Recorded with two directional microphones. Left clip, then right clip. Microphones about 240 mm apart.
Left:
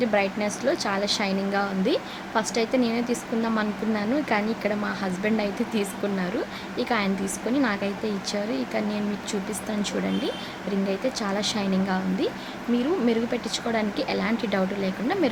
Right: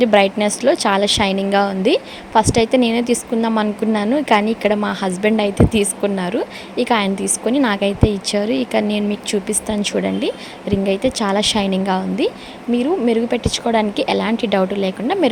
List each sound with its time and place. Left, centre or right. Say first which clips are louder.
0.0 s a woman's voice: right 10 dB; right